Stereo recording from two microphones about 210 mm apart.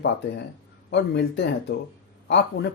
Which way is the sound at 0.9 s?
55° left (ahead or behind).